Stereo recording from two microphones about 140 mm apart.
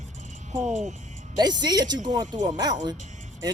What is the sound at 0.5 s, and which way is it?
Speech, 60° right (ahead or behind).